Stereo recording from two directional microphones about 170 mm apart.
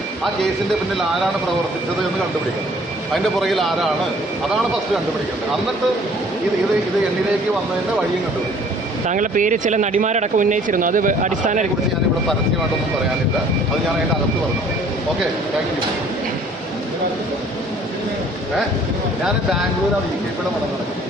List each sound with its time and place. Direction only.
3.4 s speech: centre (ahead or behind)
9.0 s speech: 50° right (ahead or behind)